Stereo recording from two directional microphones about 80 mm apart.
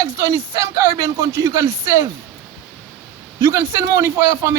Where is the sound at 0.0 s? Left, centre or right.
Right.